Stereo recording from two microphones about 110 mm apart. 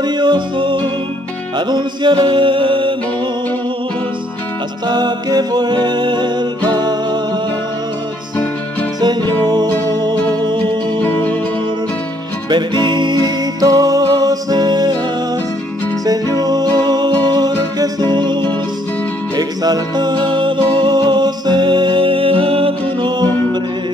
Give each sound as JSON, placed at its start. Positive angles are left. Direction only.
{"t": 0.0, "sound": "music", "side_deg": -45}
{"t": 4.8, "sound": "music", "side_deg": -40}
{"t": 9.0, "sound": "music", "side_deg": -40}
{"t": 11.1, "sound": "music", "side_deg": 20}
{"t": 12.4, "sound": "music", "side_deg": -45}
{"t": 16.1, "sound": "music", "side_deg": -35}
{"t": 23.0, "sound": "music", "side_deg": -40}